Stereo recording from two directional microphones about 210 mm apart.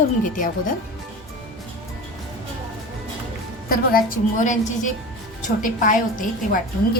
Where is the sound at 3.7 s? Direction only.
45° left (ahead or behind).